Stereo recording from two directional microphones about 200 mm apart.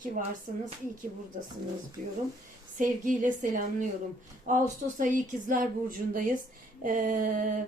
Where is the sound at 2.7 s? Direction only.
40° right (ahead or behind).